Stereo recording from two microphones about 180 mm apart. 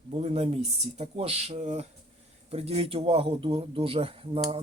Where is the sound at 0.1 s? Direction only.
35° right (ahead or behind).